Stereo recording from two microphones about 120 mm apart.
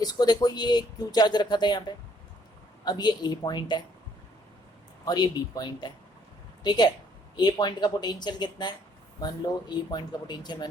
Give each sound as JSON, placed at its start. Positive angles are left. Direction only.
{"t": 0.0, "sound": "speech", "side_deg": 35}
{"t": 2.8, "sound": "speech", "side_deg": 35}
{"t": 5.0, "sound": "speech", "side_deg": 35}